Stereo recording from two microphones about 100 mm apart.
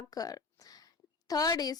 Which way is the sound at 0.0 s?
40° left (ahead or behind).